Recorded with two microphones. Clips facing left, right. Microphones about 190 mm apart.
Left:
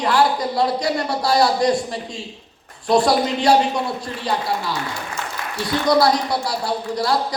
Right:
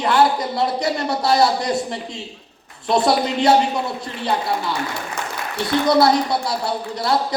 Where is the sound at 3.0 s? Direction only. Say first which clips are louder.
Right 1 dB; 25° right (ahead or behind).